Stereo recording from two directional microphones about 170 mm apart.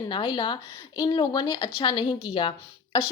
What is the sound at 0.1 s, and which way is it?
Speech, 25° left (ahead or behind).